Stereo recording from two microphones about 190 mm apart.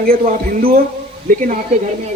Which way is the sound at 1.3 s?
50° right (ahead or behind).